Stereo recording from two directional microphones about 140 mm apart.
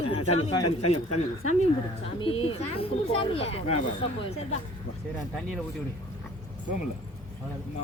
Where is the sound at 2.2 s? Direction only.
40° left (ahead or behind).